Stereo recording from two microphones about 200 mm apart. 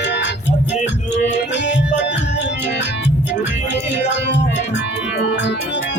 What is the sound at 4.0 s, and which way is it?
Music, 60° left (ahead or behind).